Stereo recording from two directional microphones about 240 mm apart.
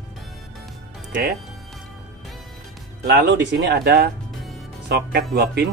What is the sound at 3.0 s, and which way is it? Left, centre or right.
Speech, right.